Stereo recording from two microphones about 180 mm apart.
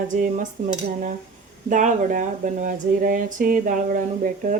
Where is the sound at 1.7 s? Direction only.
45° right (ahead or behind).